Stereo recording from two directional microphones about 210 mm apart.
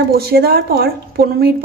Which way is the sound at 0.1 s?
50° right (ahead or behind).